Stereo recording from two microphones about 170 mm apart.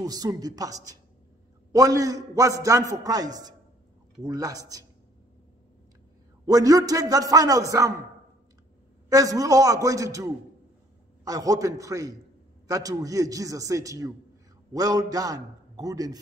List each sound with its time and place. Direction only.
0.0 s a man's voice: 20° right (ahead or behind)
6.4 s a man's voice: 20° right (ahead or behind)
9.1 s a man's voice: 20° right (ahead or behind)